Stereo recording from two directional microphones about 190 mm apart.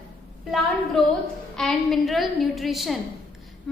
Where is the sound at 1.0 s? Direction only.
Centre (ahead or behind).